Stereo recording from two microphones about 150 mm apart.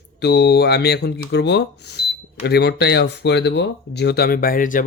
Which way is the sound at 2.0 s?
90° left.